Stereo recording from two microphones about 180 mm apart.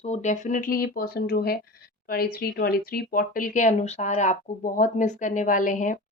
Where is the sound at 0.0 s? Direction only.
40° left (ahead or behind).